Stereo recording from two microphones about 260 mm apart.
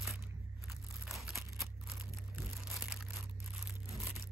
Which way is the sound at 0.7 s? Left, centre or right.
Centre.